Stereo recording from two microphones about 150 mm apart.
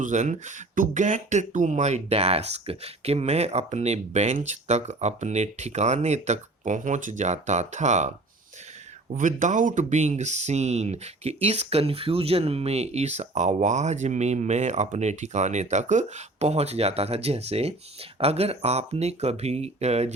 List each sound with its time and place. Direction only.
0.0 s speech: 55° right (ahead or behind)
9.1 s speech: 55° right (ahead or behind)